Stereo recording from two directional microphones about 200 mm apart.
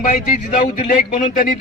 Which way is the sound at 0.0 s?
45° left (ahead or behind).